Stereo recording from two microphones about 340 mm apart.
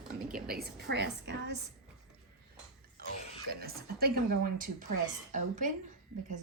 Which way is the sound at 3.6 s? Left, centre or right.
Right.